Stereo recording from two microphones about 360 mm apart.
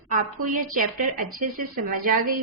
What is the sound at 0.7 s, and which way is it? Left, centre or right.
Female singing, right.